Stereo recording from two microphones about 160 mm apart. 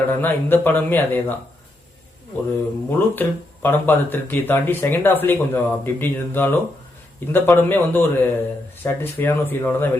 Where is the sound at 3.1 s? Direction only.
10° left (ahead or behind).